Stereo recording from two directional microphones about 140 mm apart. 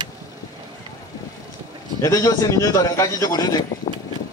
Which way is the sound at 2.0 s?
20° left (ahead or behind).